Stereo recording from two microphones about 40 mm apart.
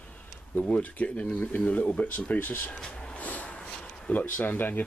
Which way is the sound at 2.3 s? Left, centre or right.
Left.